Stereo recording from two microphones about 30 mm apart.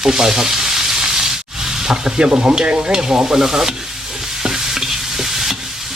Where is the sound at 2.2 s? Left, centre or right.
Right.